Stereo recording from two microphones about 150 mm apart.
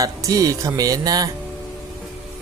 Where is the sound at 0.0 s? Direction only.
20° right (ahead or behind).